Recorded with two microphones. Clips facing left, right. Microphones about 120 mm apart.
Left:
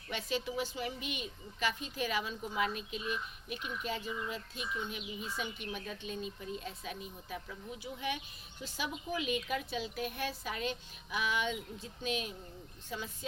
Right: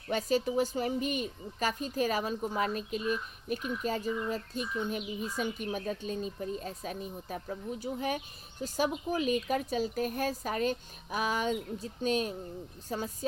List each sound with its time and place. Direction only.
0.1 s a woman's voice: 40° right (ahead or behind)